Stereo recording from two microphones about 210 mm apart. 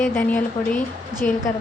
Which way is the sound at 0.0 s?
5° left (ahead or behind).